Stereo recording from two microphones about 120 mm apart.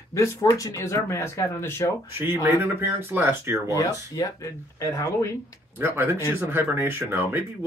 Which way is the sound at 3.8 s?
30° left (ahead or behind).